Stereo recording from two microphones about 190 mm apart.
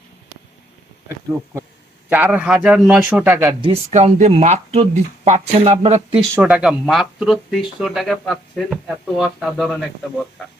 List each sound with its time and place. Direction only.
2.0 s a man's voice: 10° right (ahead or behind)
3.6 s speech: 35° right (ahead or behind)
6.3 s speech: 5° right (ahead or behind)